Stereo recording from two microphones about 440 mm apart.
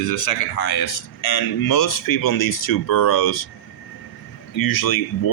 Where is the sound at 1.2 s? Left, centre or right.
Left.